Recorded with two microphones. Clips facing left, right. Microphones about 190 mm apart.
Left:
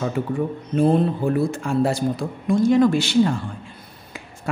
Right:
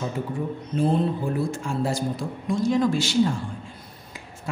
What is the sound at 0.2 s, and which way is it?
Speech, 70° left (ahead or behind).